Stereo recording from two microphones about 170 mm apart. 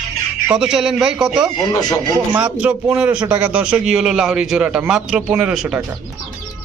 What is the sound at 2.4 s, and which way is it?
A man's voice, 10° right (ahead or behind).